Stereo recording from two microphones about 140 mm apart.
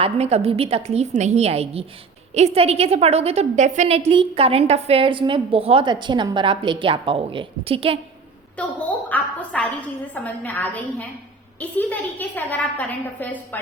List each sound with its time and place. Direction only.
0.0 s a woman's voice: 50° right (ahead or behind)
8.5 s a woman's voice: 10° left (ahead or behind)